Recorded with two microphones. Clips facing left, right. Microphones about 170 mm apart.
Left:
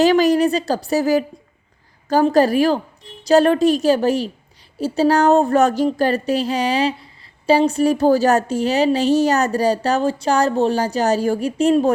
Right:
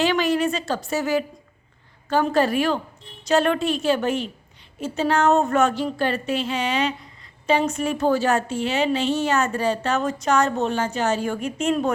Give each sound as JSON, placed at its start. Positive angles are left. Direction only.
{"t": 0.0, "sound": "a woman's voice", "side_deg": 40}